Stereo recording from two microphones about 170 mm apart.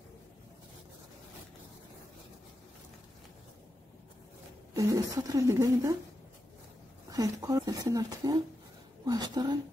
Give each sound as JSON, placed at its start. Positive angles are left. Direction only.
{"t": 4.7, "sound": "speech", "side_deg": -20}
{"t": 7.1, "sound": "speech", "side_deg": -20}